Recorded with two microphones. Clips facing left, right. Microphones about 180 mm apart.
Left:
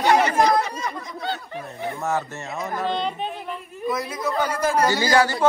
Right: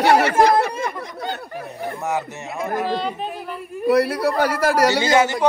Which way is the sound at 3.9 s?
70° right (ahead or behind).